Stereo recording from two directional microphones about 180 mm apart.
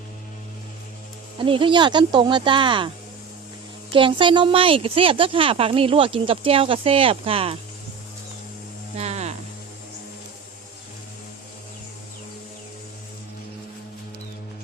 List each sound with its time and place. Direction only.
1.4 s speech: 30° right (ahead or behind)
3.9 s a woman's voice: 30° right (ahead or behind)
9.0 s livestock: 35° right (ahead or behind)